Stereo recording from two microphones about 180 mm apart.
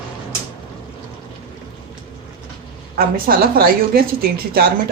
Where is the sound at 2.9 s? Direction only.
55° right (ahead or behind).